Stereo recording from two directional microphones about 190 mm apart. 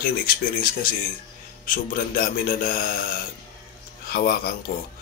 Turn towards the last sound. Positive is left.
turn(degrees=55)  # may be behind; listen again after turning